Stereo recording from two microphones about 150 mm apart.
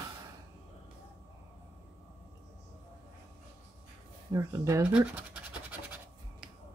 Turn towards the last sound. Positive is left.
turn(degrees=-10)  # may be behind; listen again after turning